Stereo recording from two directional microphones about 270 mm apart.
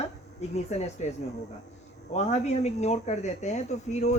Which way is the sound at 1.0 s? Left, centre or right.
Left.